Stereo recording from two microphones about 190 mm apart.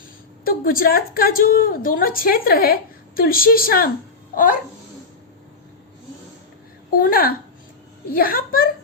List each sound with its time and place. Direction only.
0.4 s a woman's voice: 50° left (ahead or behind)
6.9 s a woman's voice: 50° left (ahead or behind)